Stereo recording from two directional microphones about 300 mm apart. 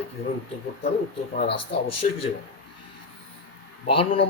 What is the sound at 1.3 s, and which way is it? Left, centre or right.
Speech, left.